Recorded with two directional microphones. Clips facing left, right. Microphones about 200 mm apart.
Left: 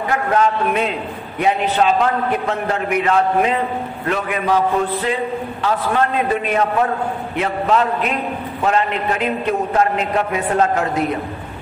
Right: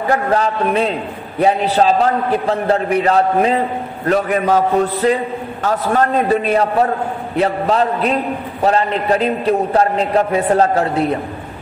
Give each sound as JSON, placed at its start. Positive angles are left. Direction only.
{"t": 0.0, "sound": "a man's voice", "side_deg": -35}